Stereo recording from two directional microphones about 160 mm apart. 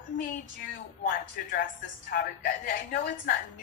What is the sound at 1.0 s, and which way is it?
A woman's voice, 60° left (ahead or behind).